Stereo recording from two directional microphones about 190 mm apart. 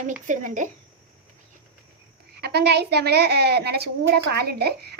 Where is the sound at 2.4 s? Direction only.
60° right (ahead or behind).